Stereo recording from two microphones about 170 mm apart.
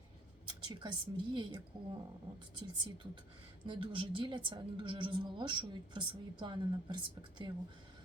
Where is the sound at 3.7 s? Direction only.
30° right (ahead or behind).